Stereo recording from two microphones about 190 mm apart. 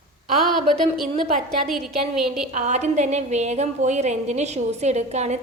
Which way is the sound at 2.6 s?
40° right (ahead or behind).